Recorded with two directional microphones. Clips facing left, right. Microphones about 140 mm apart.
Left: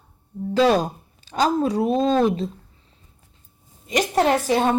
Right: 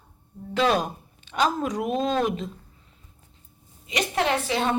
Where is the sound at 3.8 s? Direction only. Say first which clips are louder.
Left 6 dB; 45° left (ahead or behind).